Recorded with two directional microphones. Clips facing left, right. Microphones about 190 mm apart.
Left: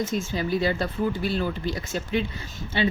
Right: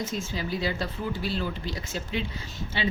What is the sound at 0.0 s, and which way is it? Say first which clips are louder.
A woman's voice: left 5 dB; 50° left (ahead or behind).